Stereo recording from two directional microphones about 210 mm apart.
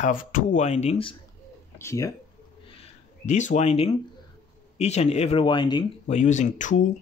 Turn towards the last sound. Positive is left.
turn(degrees=35)  # may be behind; listen again after turning